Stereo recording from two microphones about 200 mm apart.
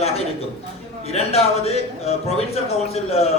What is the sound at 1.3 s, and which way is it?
Speech, 30° left (ahead or behind).